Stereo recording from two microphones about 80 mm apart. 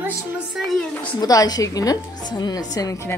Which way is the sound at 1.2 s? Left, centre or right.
Left.